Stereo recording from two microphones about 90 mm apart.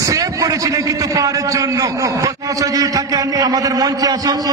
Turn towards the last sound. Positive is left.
turn(degrees=-45)  # may be behind; listen again after turning